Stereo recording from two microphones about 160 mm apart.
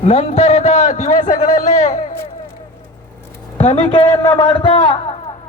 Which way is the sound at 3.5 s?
40° left (ahead or behind).